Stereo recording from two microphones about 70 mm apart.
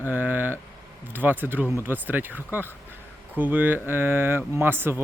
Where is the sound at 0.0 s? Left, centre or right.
Right.